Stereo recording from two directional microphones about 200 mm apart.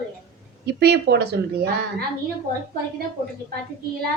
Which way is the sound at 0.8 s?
55° right (ahead or behind).